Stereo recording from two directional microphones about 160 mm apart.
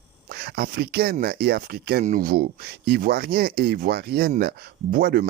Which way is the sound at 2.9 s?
75° right (ahead or behind).